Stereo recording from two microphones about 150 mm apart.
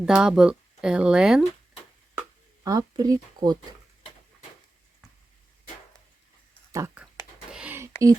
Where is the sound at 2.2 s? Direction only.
25° right (ahead or behind).